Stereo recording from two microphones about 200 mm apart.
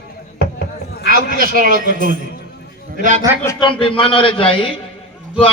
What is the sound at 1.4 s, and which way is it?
Speech, 45° right (ahead or behind).